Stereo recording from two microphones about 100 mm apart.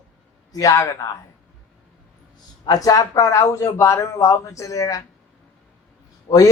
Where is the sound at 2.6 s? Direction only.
35° left (ahead or behind).